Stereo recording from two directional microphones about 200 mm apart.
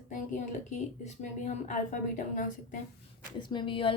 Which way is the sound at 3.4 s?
25° left (ahead or behind).